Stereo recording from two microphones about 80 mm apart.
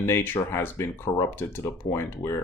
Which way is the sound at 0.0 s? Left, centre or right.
Left.